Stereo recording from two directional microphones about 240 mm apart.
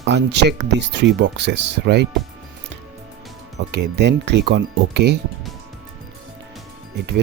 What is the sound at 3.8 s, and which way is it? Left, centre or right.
Speech, right.